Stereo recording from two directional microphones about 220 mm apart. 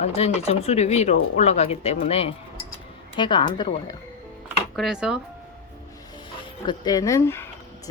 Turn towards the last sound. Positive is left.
turn(degrees=10)  # may be behind; listen again after turning